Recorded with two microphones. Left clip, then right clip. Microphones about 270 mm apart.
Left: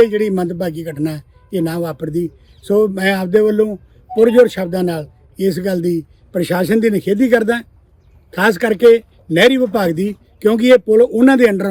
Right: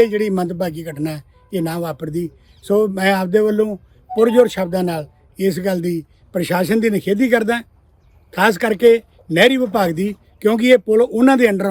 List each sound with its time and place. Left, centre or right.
0.0 s speech: centre